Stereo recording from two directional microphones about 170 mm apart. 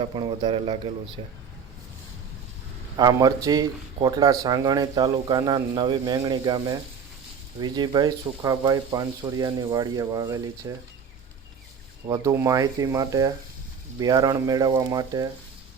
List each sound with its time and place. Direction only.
0.0 s speech: 30° right (ahead or behind)
3.0 s speech: 20° right (ahead or behind)
12.0 s speech: 20° right (ahead or behind)